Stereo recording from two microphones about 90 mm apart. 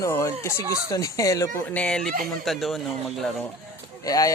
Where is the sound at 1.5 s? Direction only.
20° left (ahead or behind).